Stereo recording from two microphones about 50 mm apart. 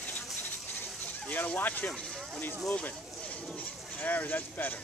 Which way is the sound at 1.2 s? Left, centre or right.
Left.